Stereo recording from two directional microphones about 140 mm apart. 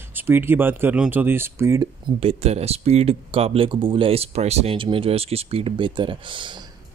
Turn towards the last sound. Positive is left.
turn(degrees=-35)  # may be behind; listen again after turning